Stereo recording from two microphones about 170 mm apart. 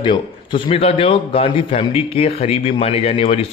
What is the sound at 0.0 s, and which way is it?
A man's voice, 30° left (ahead or behind).